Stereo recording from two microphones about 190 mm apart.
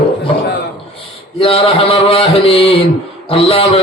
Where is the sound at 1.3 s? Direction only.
30° left (ahead or behind).